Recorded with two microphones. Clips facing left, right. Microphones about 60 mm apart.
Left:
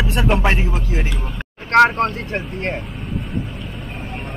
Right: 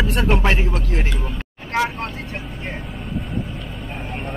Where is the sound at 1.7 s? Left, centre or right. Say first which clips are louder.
Left 9 dB; left.